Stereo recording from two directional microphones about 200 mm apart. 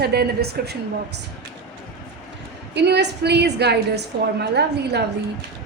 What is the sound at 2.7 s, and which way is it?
A woman's voice, 55° right (ahead or behind).